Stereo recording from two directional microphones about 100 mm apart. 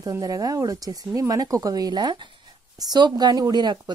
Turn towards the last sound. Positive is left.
turn(degrees=-45)  # may be behind; listen again after turning